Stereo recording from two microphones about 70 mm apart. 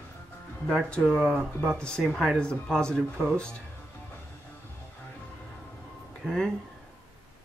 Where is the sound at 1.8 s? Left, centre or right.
Centre.